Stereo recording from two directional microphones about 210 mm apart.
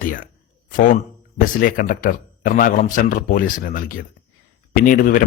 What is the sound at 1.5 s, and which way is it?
Speech, 40° left (ahead or behind).